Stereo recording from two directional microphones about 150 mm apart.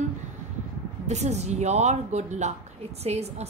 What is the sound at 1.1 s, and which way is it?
A woman's voice, 50° right (ahead or behind).